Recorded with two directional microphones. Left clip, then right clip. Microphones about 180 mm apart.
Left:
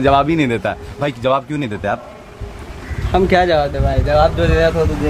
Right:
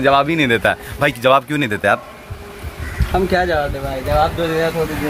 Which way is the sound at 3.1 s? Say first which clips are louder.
Left 4 dB; 20° left (ahead or behind).